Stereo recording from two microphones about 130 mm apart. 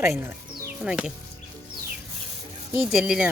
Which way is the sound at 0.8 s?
10° right (ahead or behind).